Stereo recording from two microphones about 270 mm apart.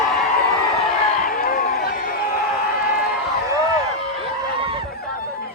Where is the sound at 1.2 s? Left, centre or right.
Left.